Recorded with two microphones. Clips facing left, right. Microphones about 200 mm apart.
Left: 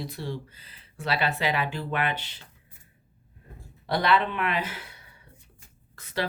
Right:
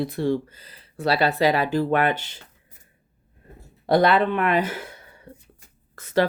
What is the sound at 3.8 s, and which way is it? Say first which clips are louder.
Speech: right 6 dB; 45° right (ahead or behind).